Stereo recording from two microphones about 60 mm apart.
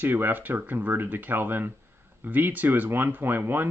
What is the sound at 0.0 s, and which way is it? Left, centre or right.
Speech, right.